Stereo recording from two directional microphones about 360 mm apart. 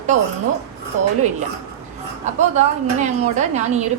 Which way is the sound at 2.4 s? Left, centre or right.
Centre.